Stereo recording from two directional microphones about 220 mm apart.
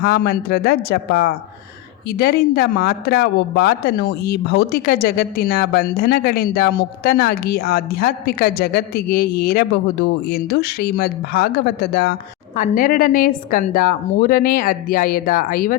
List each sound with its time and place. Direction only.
0.0 s a woman's voice: 45° left (ahead or behind)